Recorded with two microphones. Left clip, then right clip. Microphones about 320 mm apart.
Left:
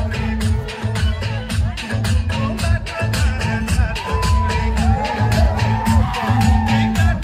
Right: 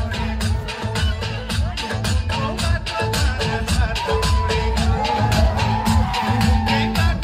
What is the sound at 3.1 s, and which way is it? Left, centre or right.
Music, right.